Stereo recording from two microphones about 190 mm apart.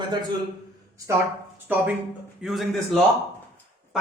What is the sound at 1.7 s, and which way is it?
A man's voice, 10° right (ahead or behind).